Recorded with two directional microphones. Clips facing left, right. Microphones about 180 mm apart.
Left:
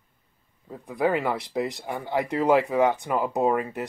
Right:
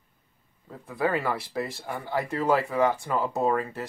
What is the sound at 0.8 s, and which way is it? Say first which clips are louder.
Speech: left 3 dB; 15° left (ahead or behind).